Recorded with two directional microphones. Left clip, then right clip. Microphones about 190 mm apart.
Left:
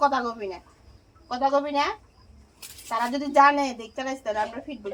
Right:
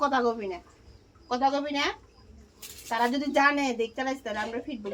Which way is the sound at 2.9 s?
25° right (ahead or behind).